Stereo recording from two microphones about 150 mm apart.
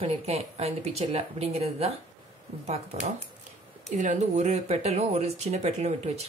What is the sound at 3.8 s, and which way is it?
Speech, 50° right (ahead or behind).